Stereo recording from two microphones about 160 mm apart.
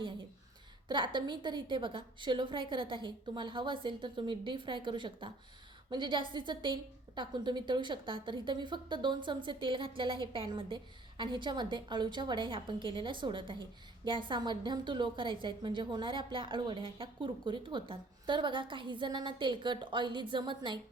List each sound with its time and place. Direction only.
0.9 s a woman's voice: 30° right (ahead or behind)